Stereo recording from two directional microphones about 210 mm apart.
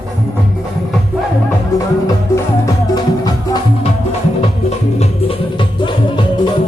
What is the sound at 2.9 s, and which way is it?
Music, 20° left (ahead or behind).